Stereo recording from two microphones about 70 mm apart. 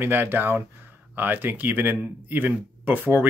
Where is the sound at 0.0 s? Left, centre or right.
Right.